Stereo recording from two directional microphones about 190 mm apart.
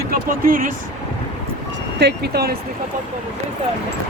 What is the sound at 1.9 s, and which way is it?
Speech, 60° right (ahead or behind).